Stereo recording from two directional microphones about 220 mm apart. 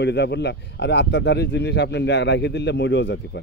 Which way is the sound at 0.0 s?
50° left (ahead or behind).